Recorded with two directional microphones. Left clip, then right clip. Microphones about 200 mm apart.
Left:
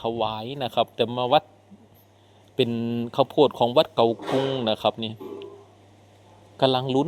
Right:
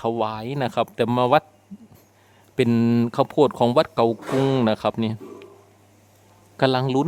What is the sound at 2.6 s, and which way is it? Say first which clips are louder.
Speech: right 8 dB; 40° right (ahead or behind).